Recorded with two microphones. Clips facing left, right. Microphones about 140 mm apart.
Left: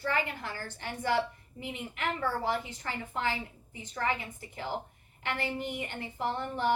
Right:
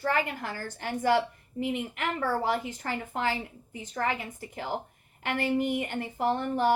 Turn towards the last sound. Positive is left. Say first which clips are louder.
# right 5 dB
turn(degrees=-45)  # may be behind; listen again after turning